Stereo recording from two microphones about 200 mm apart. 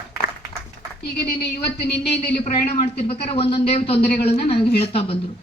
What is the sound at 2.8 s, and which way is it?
Speech, 30° left (ahead or behind).